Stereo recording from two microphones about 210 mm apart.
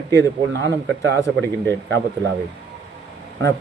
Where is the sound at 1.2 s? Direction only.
10° left (ahead or behind).